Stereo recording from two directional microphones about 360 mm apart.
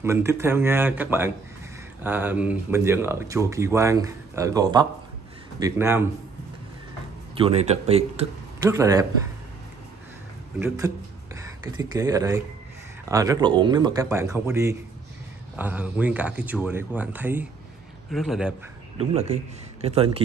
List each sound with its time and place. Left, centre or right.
0.0 s speech: centre
7.3 s a man's voice: centre
11.3 s speech: centre
18.9 s speech: centre